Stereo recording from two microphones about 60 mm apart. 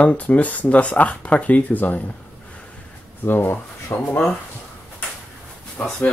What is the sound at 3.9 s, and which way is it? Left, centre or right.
Speech, left.